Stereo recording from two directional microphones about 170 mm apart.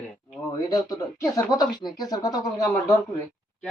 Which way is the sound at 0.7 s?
20° left (ahead or behind).